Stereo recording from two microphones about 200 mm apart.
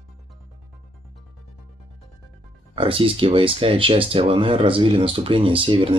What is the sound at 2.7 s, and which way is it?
Speech, 25° right (ahead or behind).